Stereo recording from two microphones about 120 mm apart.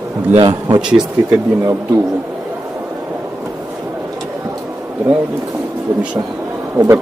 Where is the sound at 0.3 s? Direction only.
40° right (ahead or behind).